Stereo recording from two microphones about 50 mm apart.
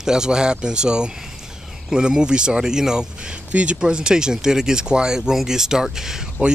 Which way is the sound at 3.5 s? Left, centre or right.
Right.